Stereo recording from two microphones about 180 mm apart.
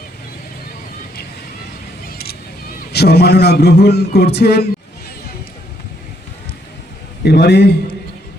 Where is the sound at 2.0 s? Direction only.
60° left (ahead or behind).